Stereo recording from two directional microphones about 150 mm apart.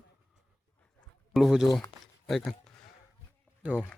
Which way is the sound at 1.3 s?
Centre (ahead or behind).